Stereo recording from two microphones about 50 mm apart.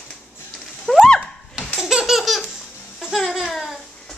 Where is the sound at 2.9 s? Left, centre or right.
Centre.